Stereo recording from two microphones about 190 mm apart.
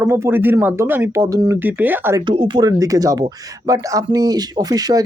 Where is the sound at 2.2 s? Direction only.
25° right (ahead or behind).